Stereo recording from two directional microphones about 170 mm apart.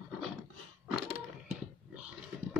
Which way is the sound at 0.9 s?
10° right (ahead or behind).